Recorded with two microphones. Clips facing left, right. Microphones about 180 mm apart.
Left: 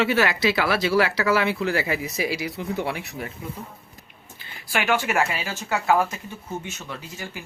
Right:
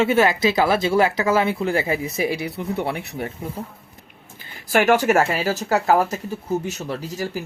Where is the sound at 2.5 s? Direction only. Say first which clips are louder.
Right 2 dB; 65° right (ahead or behind).